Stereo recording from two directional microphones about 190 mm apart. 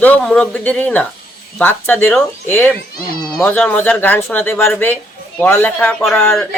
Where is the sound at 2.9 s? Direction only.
50° left (ahead or behind).